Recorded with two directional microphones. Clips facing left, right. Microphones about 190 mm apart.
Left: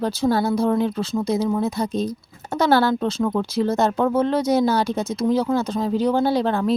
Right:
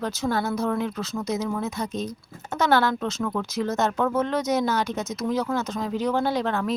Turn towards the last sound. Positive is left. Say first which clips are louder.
# left 5 dB
turn(degrees=30)  # may be behind; listen again after turning